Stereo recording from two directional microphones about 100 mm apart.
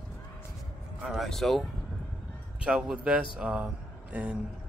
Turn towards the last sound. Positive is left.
turn(degrees=-10)  # may be behind; listen again after turning